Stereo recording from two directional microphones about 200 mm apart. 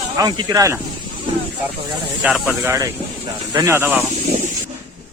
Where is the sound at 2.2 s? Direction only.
Centre (ahead or behind).